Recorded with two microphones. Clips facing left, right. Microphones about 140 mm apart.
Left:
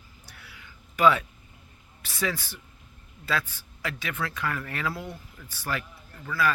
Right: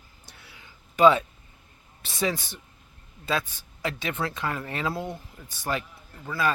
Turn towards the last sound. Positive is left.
turn(degrees=-25)  # may be behind; listen again after turning